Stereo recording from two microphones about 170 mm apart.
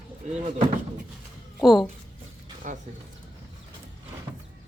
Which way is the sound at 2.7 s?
45° right (ahead or behind).